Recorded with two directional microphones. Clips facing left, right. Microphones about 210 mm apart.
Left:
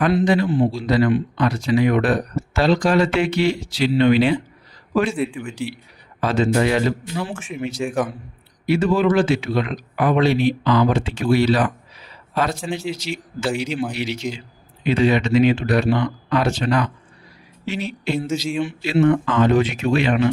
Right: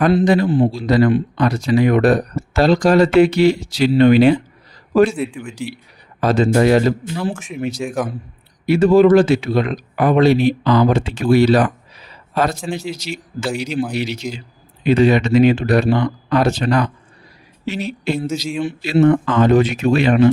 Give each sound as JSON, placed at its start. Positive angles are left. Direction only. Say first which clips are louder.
{"t": 0.0, "sound": "speech", "louder": "right 3 dB", "side_deg": -35}
{"t": 5.1, "sound": "speech", "louder": "even", "side_deg": 0}
{"t": 6.1, "sound": "speech", "louder": "right 4 dB", "side_deg": -40}
{"t": 7.3, "sound": "speech", "louder": "right 2 dB", "side_deg": 5}
{"t": 8.6, "sound": "speech", "louder": "right 6 dB", "side_deg": -40}
{"t": 18.4, "sound": "speech", "louder": "right 1 dB", "side_deg": 0}
{"t": 18.8, "sound": "speech", "louder": "right 4 dB", "side_deg": -40}